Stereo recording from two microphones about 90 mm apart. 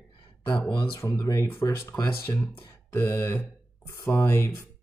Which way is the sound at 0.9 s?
35° left (ahead or behind).